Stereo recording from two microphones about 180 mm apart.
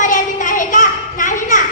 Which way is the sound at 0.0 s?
45° left (ahead or behind).